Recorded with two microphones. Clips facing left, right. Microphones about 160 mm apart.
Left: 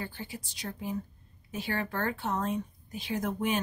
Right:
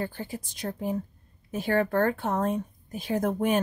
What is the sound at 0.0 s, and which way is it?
Speech, 45° right (ahead or behind).